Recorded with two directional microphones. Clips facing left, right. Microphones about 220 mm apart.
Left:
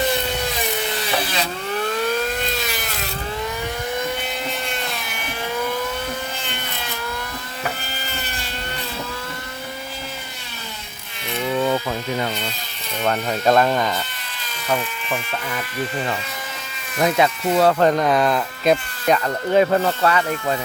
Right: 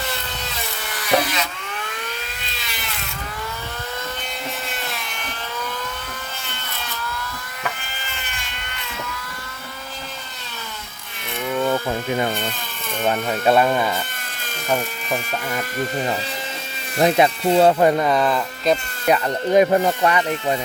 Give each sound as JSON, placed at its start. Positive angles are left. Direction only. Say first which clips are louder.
{"t": 0.0, "sound": "a sound", "louder": "left 8 dB", "side_deg": 15}
{"t": 8.0, "sound": "motorboat", "louder": "left 4 dB", "side_deg": 40}
{"t": 13.0, "sound": "speech", "louder": "even", "side_deg": -5}
{"t": 14.7, "sound": "speech", "louder": "right 1 dB", "side_deg": -40}
{"t": 17.0, "sound": "speech", "louder": "right 2 dB", "side_deg": -30}
{"t": 17.7, "sound": "speech", "louder": "even", "side_deg": -10}
{"t": 19.0, "sound": "speech", "louder": "right 1 dB", "side_deg": -10}